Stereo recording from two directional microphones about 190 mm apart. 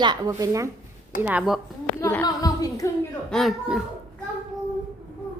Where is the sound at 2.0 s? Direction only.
10° left (ahead or behind).